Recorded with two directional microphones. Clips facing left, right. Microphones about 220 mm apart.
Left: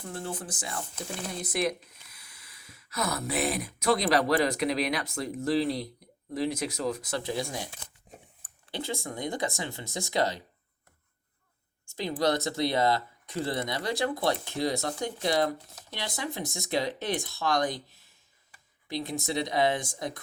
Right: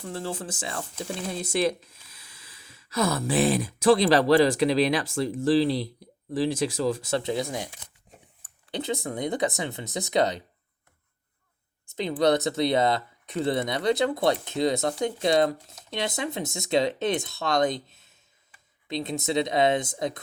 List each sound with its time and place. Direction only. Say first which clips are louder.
0.3 s speech: right 3 dB; 25° right (ahead or behind)
11.9 s speech: right 5 dB; 20° right (ahead or behind)